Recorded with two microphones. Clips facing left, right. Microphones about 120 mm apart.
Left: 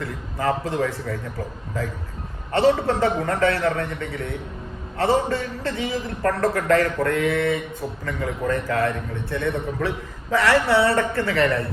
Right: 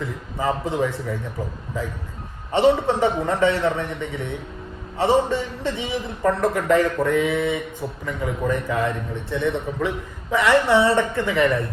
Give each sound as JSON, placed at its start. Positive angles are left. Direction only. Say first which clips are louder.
{"t": 0.0, "sound": "a man's voice", "louder": "even", "side_deg": -15}